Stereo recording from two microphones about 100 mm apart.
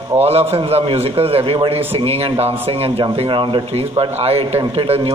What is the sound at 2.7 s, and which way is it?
Speech, 70° right (ahead or behind).